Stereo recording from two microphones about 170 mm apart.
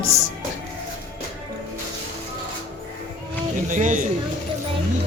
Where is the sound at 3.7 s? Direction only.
50° right (ahead or behind).